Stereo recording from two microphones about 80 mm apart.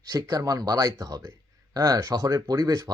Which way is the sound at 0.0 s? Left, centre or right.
Right.